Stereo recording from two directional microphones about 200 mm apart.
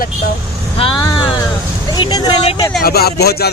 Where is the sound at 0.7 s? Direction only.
25° left (ahead or behind).